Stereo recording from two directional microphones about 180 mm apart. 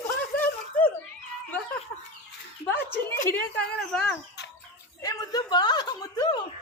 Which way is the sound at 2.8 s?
15° left (ahead or behind).